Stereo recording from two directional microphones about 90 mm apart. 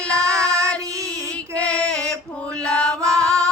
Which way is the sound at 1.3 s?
15° left (ahead or behind).